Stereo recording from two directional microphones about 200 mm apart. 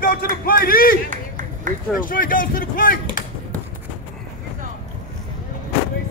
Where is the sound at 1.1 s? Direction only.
40° right (ahead or behind).